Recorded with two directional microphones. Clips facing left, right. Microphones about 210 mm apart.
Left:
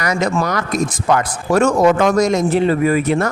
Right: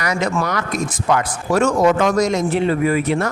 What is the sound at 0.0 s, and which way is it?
A man's voice, 40° left (ahead or behind).